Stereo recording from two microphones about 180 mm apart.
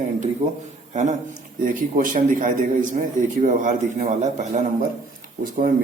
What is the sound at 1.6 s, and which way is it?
Speech, 45° right (ahead or behind).